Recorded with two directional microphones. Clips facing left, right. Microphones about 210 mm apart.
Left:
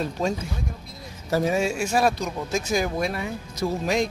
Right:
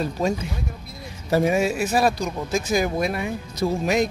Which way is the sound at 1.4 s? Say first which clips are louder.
Right 2 dB; 10° right (ahead or behind).